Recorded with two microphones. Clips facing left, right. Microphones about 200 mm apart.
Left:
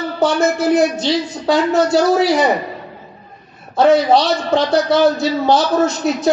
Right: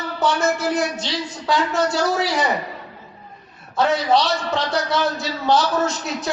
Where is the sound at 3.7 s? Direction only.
35° left (ahead or behind).